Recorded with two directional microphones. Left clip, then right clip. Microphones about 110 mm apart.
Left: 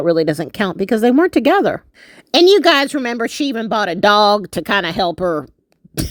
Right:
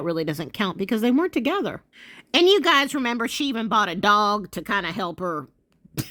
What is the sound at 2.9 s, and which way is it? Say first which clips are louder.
Speech: left 5 dB; 30° left (ahead or behind).